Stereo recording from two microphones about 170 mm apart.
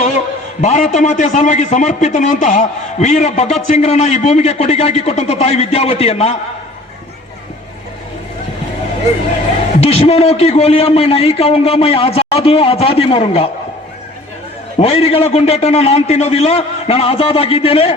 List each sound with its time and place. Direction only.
0.6 s a man's voice: 45° left (ahead or behind)
9.8 s a man's voice: 40° left (ahead or behind)
14.8 s a man's voice: 35° left (ahead or behind)